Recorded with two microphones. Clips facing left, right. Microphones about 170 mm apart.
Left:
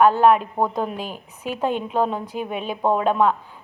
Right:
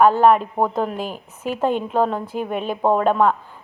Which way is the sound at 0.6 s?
15° right (ahead or behind).